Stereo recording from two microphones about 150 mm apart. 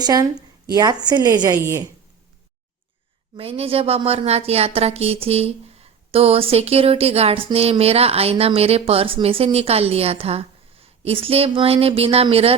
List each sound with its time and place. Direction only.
0.0 s a woman's voice: 25° right (ahead or behind)
3.3 s a woman's voice: 40° right (ahead or behind)